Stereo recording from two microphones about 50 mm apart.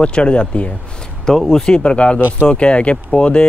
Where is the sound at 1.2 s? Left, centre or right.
Centre.